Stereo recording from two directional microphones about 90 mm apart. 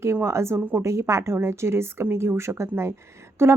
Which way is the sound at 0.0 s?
30° right (ahead or behind).